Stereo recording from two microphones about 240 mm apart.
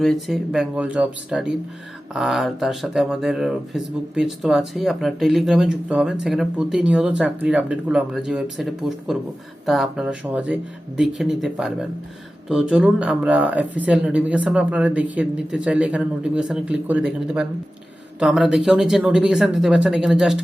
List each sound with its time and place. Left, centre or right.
0.0 s speech: centre